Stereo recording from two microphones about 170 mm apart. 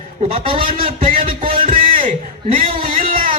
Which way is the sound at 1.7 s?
55° right (ahead or behind).